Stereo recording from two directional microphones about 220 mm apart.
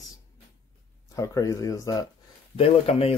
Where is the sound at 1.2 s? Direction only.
15° left (ahead or behind).